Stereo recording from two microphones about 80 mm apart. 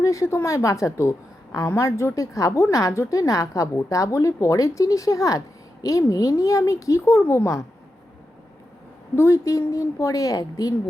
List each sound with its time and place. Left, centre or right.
0.0 s a woman's voice: left
9.1 s a woman's voice: left